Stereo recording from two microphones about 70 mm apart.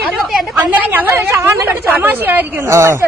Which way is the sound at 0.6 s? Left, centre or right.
Right.